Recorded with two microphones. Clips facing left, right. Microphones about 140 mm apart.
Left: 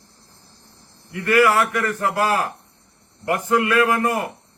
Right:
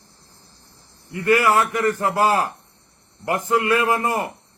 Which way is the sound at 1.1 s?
25° right (ahead or behind).